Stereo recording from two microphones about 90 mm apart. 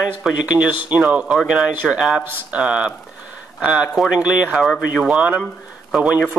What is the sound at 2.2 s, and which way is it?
Speech, 25° right (ahead or behind).